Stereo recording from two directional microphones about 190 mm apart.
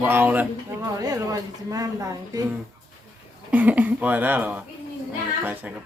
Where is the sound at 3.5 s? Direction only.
10° right (ahead or behind).